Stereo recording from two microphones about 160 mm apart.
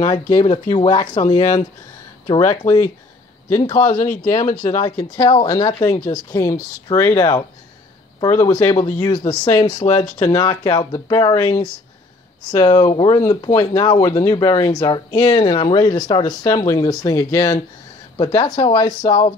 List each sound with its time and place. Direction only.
0.0 s speech: 50° left (ahead or behind)
0.7 s speech: 25° left (ahead or behind)
1.1 s speech: 50° left (ahead or behind)
2.3 s speech: 20° left (ahead or behind)
4.0 s speech: 55° left (ahead or behind)
4.6 s speech: 25° left (ahead or behind)
12.4 s speech: 25° left (ahead or behind)